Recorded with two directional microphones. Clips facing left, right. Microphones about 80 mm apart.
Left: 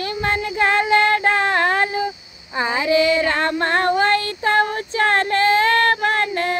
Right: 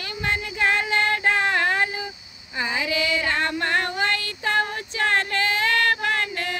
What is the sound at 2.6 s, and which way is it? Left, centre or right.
Female singing, left.